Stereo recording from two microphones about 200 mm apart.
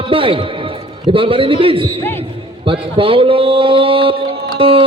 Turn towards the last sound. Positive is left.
turn(degrees=-25)  # may be behind; listen again after turning